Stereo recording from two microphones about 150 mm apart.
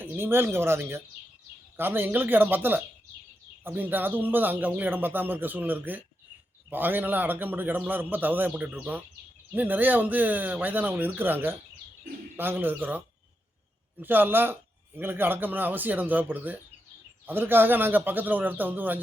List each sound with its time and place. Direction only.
0.0 s a man's voice: 15° right (ahead or behind)
14.0 s a man's voice: 15° right (ahead or behind)